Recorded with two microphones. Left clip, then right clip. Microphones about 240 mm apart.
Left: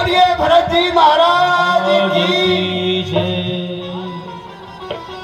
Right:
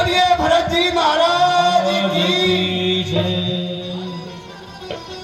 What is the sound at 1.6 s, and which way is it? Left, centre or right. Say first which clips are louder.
Music: left 2 dB; left.